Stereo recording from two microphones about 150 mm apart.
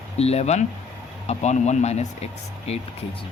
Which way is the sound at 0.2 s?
45° left (ahead or behind).